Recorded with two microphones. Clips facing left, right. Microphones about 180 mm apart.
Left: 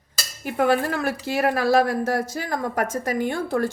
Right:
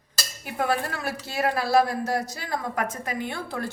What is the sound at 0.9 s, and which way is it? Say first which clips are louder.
A woman's voice: left 7 dB; 55° left (ahead or behind).